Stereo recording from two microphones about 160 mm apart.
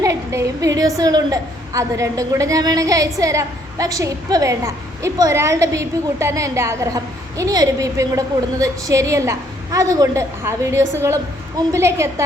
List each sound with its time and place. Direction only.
0.0 s a woman's voice: 20° right (ahead or behind)